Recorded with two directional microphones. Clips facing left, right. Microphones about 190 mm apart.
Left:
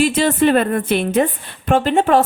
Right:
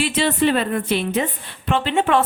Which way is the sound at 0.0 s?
45° left (ahead or behind).